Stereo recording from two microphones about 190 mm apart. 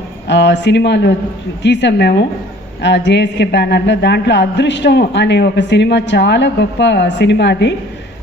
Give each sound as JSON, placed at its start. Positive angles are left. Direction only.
{"t": 0.3, "sound": "a man's voice", "side_deg": 65}